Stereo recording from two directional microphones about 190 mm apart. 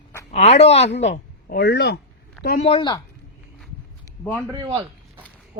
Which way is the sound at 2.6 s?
30° left (ahead or behind).